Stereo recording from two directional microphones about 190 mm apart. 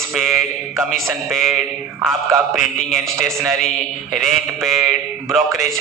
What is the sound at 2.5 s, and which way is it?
A man's voice, centre (ahead or behind).